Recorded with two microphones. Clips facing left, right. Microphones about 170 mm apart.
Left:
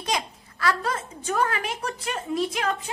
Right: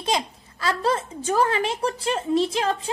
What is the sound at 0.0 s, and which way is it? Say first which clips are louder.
A woman's voice: right 3 dB; 25° right (ahead or behind).